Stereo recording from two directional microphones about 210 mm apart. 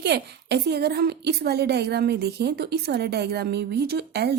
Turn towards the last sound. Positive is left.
turn(degrees=-50)  # may be behind; listen again after turning